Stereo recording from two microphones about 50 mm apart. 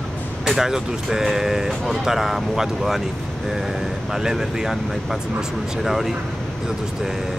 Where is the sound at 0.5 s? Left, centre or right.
Centre.